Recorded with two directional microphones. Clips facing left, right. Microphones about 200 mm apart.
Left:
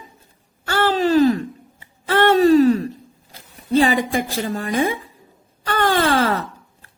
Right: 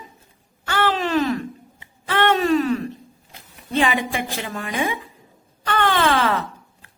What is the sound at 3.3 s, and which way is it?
Speech, 35° left (ahead or behind).